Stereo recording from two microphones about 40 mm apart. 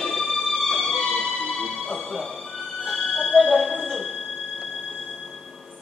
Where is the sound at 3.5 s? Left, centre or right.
Centre.